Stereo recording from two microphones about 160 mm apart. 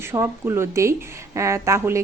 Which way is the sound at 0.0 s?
15° right (ahead or behind).